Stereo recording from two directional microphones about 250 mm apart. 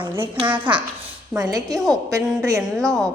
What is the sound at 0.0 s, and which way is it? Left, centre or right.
Speech, centre.